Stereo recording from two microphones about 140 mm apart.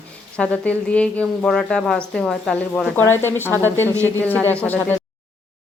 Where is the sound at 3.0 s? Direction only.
15° left (ahead or behind).